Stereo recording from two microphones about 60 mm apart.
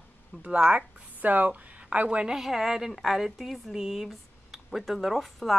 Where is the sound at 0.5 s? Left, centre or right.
Right.